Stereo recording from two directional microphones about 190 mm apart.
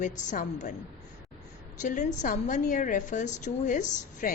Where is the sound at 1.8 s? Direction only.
40° left (ahead or behind).